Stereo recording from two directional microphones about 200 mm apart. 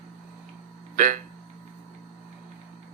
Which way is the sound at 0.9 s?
40° right (ahead or behind).